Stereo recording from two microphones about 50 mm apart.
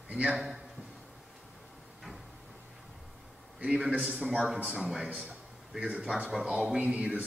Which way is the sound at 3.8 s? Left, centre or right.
Right.